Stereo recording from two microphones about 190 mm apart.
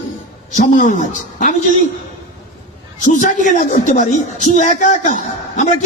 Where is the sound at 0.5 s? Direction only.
45° left (ahead or behind).